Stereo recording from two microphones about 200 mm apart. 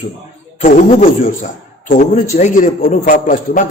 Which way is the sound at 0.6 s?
40° left (ahead or behind).